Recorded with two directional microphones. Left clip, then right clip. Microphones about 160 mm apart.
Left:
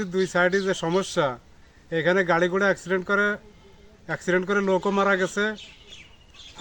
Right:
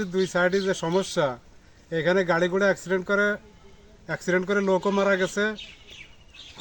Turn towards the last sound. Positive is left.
turn(degrees=5)  # may be behind; listen again after turning